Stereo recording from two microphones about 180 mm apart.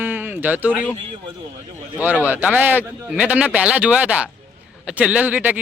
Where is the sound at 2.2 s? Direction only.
10° right (ahead or behind).